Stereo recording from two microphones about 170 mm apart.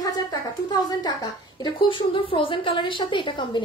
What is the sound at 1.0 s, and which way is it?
A woman's voice, 25° left (ahead or behind).